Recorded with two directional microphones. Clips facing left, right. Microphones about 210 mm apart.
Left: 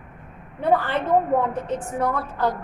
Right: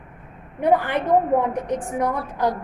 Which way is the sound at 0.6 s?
15° right (ahead or behind).